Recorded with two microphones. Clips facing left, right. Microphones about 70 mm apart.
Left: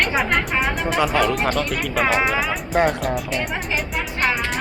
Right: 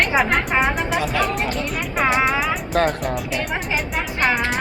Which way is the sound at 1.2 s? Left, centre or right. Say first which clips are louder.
Left 3 dB; left.